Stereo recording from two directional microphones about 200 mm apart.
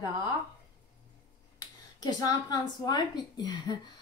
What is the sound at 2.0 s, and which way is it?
A woman's voice, 20° left (ahead or behind).